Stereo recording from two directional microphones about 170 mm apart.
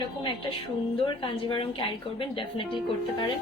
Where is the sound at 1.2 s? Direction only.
30° left (ahead or behind).